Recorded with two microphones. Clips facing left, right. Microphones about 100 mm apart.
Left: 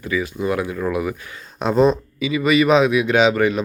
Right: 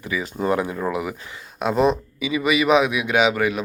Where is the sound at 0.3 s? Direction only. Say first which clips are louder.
Even; 35° right (ahead or behind).